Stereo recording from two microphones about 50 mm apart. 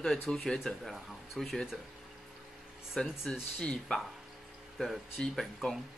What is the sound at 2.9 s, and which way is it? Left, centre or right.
Speech, centre.